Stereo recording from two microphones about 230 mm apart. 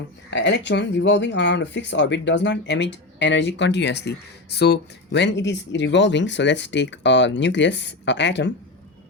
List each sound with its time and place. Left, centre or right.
0.3 s speech: left